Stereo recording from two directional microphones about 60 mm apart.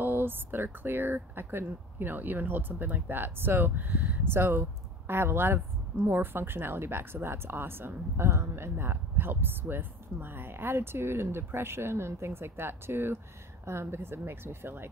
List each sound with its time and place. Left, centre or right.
0.0 s a woman's voice: right